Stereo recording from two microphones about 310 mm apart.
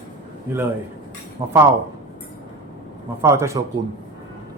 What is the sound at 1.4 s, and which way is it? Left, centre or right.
Speech, centre.